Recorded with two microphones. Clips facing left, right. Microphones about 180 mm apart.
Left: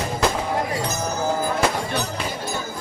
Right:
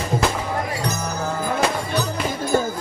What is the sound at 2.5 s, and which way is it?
Music, 45° right (ahead or behind).